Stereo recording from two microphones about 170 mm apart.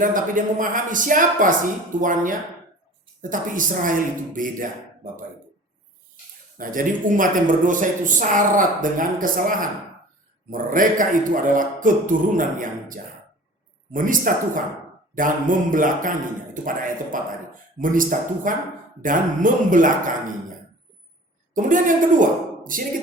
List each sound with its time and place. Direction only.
0.0 s speech: 50° right (ahead or behind)
6.6 s speech: 55° right (ahead or behind)
17.1 s speech: 50° right (ahead or behind)
21.5 s speech: 50° right (ahead or behind)